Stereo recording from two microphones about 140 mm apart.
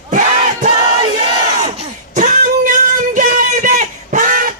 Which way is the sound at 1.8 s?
60° right (ahead or behind).